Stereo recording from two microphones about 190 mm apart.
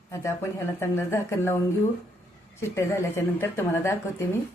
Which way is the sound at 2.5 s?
15° left (ahead or behind).